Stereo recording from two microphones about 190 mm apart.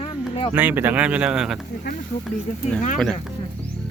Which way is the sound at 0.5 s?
10° right (ahead or behind).